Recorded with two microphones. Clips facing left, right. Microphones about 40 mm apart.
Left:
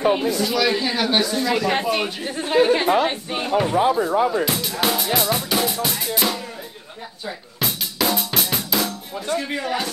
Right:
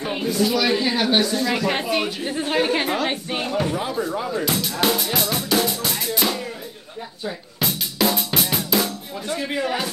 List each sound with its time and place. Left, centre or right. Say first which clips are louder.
0.1 s music: left 1 dB; centre
3.4 s speech: left 7 dB; centre
4.5 s music: right 1 dB; centre
7.5 s drum: even; centre
9.3 s music: even; centre